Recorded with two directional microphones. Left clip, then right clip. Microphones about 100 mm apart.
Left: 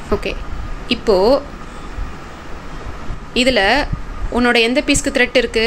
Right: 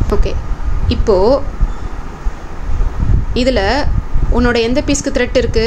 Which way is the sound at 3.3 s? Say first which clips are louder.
Left 1 dB; 5° right (ahead or behind).